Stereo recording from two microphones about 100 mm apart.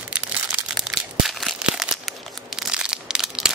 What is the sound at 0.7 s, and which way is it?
Crumpling, 5° right (ahead or behind).